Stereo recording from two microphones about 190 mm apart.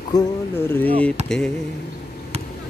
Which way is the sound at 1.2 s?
35° right (ahead or behind).